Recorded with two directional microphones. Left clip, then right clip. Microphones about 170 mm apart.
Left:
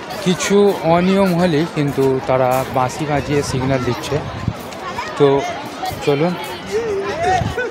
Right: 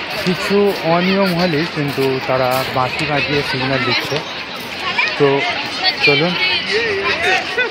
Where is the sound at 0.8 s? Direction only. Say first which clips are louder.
Even; 20° left (ahead or behind).